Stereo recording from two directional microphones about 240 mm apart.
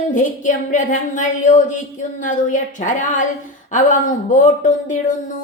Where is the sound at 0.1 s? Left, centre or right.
Left.